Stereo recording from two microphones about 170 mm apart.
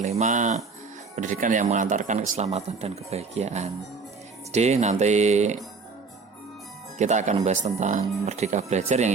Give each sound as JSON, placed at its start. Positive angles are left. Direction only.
{"t": 0.2, "sound": "speech", "side_deg": -45}
{"t": 7.0, "sound": "speech", "side_deg": -45}